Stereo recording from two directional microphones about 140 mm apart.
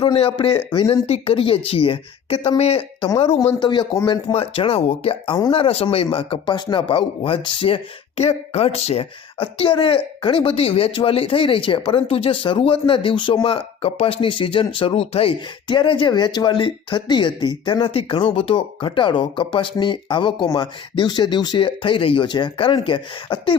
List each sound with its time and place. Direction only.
0.0 s a woman's voice: 40° left (ahead or behind)
3.6 s speech: 30° left (ahead or behind)